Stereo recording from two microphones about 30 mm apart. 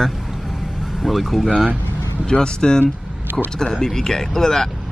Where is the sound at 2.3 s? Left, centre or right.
Left.